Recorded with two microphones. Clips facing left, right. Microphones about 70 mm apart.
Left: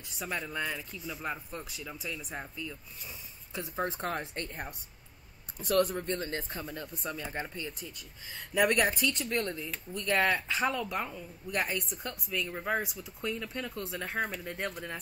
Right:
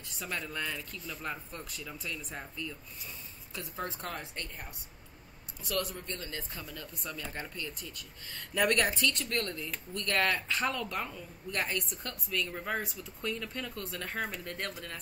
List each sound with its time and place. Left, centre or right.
0.2 s speech: centre
3.7 s speech: left; by 14.7 s centre